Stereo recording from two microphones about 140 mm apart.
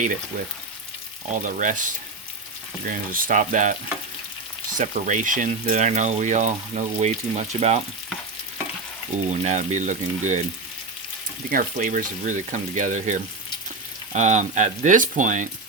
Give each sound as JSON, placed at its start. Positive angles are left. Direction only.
{"t": 1.4, "sound": "speech", "side_deg": -70}
{"t": 2.8, "sound": "speech", "side_deg": -80}
{"t": 4.8, "sound": "speech", "side_deg": -65}
{"t": 9.3, "sound": "speech", "side_deg": -55}
{"t": 11.5, "sound": "speech", "side_deg": -70}